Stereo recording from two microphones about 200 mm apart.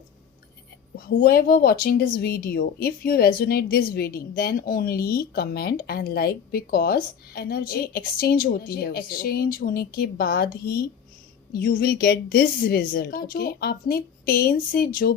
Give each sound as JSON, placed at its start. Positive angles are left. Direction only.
{"t": 0.9, "sound": "speech", "side_deg": 50}